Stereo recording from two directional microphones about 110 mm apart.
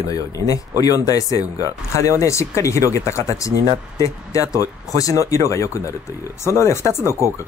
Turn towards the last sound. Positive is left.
turn(degrees=25)  # may be behind; listen again after turning